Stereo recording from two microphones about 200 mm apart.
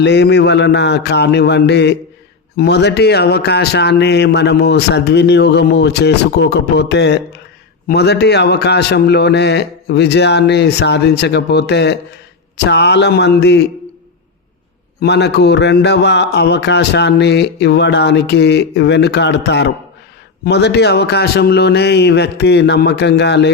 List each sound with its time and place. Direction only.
0.0 s mantra: 55° left (ahead or behind)
15.0 s mantra: 55° left (ahead or behind)